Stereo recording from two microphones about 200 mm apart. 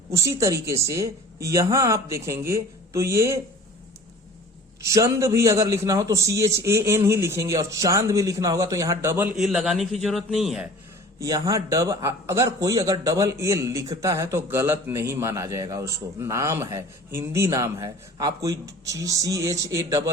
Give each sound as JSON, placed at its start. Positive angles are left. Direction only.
{"t": 0.1, "sound": "a man's voice", "side_deg": -15}
{"t": 4.9, "sound": "a man's voice", "side_deg": -15}
{"t": 9.4, "sound": "a man's voice", "side_deg": 0}
{"t": 11.2, "sound": "a man's voice", "side_deg": -15}